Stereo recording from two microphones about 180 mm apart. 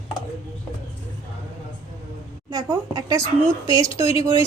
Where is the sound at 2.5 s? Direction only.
20° right (ahead or behind).